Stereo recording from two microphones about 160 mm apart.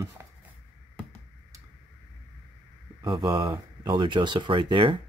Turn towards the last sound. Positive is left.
turn(degrees=-30)  # may be behind; listen again after turning